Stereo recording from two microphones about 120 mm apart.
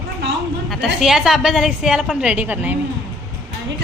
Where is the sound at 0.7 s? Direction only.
Centre (ahead or behind).